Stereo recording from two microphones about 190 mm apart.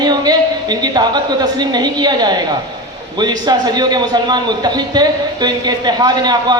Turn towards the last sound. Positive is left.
turn(degrees=-20)  # may be behind; listen again after turning